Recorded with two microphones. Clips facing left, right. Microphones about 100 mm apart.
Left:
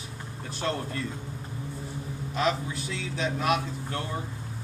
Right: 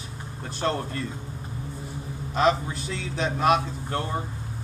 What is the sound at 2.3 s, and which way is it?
A man's voice, 40° right (ahead or behind).